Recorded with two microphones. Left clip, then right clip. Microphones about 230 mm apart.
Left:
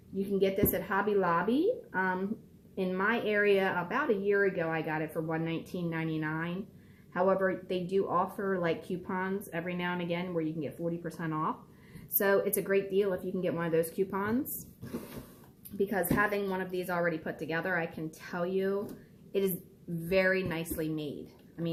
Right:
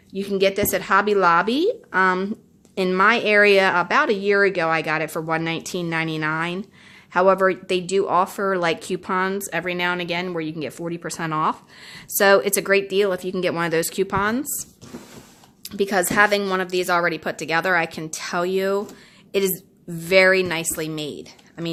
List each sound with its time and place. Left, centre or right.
0.2 s speech: right
15.8 s a woman's voice: right